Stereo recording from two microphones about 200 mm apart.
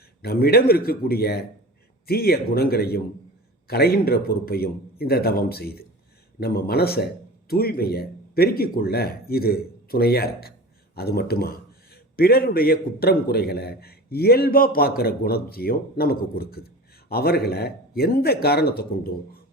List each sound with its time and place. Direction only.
0.2 s a man's voice: 50° left (ahead or behind)